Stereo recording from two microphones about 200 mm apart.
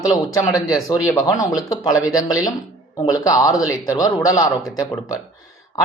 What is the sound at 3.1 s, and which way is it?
Speech, 15° left (ahead or behind).